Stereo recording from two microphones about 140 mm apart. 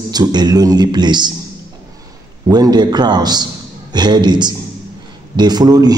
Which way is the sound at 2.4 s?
30° right (ahead or behind).